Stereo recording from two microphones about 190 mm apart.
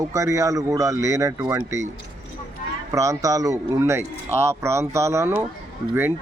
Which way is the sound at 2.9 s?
15° right (ahead or behind).